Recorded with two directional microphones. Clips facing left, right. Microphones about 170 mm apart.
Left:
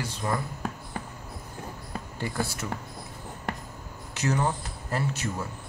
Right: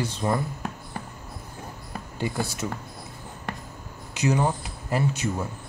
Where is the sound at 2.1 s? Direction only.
20° right (ahead or behind).